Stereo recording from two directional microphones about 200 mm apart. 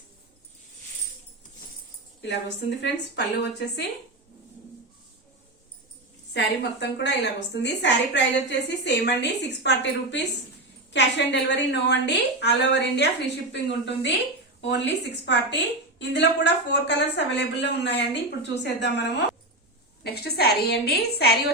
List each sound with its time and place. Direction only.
2.2 s a woman's voice: 60° left (ahead or behind)
6.3 s a woman's voice: 60° left (ahead or behind)